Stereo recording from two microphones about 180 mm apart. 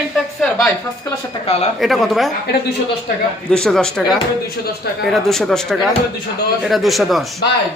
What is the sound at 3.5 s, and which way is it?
A man's voice, 5° left (ahead or behind).